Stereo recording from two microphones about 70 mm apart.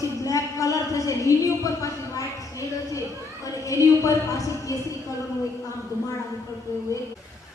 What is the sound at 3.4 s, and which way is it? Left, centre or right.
A woman's voice, left.